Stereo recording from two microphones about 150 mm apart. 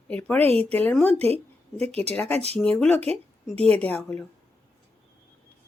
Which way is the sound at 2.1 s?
15° left (ahead or behind).